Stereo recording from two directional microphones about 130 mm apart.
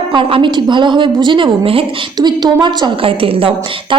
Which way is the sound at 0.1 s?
40° right (ahead or behind).